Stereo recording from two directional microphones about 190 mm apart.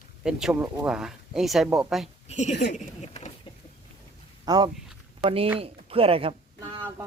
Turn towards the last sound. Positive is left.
turn(degrees=-30)  # may be behind; listen again after turning